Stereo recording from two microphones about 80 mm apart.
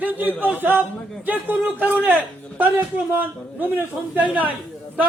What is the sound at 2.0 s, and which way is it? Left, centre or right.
A man's voice, centre.